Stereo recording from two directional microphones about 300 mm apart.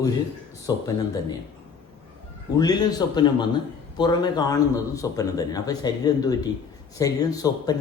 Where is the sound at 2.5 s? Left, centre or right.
Centre.